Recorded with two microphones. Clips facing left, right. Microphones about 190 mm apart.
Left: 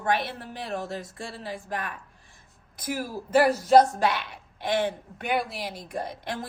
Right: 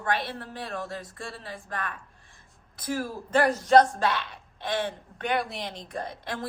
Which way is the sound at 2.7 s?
15° left (ahead or behind).